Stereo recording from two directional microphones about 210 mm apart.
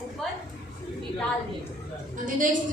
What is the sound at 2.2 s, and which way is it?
Speech, 40° right (ahead or behind).